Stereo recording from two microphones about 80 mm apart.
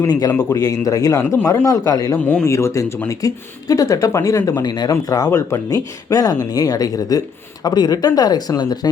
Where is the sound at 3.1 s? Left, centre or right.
Left.